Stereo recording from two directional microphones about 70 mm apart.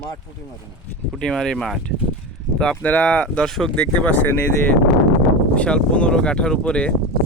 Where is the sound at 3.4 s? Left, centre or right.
Centre.